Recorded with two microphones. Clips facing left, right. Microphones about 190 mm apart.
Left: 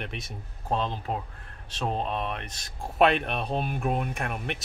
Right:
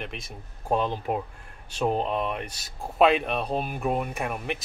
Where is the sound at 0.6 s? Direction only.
15° right (ahead or behind).